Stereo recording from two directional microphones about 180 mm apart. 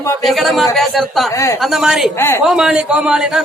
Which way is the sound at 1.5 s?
Centre (ahead or behind).